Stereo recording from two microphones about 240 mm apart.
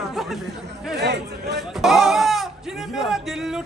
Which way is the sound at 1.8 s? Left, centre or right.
Centre.